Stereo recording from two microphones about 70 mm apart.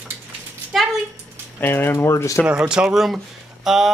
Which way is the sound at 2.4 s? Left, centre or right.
Centre.